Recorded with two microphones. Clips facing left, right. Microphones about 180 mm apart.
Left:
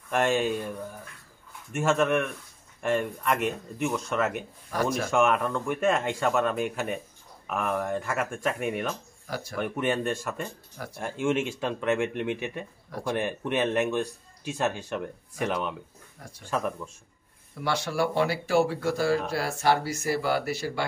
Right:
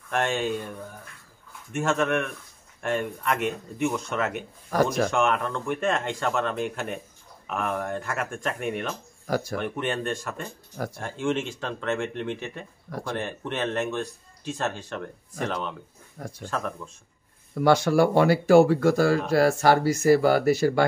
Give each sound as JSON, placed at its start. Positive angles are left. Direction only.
{"t": 0.1, "sound": "speech", "side_deg": 5}
{"t": 1.7, "sound": "speech", "side_deg": 5}
{"t": 9.3, "sound": "speech", "side_deg": -45}
{"t": 9.6, "sound": "speech", "side_deg": 5}
{"t": 17.6, "sound": "speech", "side_deg": -45}